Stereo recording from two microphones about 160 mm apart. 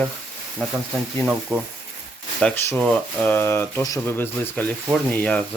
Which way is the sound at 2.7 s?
5° left (ahead or behind).